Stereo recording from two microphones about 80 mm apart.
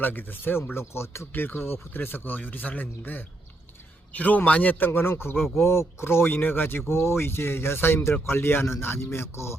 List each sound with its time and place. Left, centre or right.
0.0 s a man's voice: left